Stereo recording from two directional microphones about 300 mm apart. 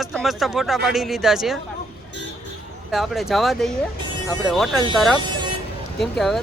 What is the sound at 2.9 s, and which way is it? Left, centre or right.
Speech, centre.